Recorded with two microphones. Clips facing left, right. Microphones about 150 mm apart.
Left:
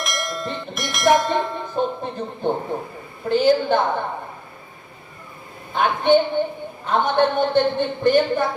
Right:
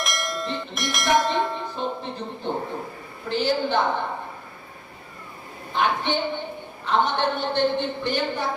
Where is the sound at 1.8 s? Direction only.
50° left (ahead or behind).